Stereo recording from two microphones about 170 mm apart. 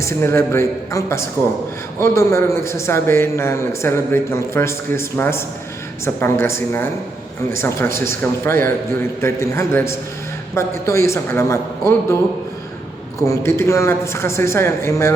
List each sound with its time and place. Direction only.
0.0 s a man's voice: 15° left (ahead or behind)
13.2 s a man's voice: 15° left (ahead or behind)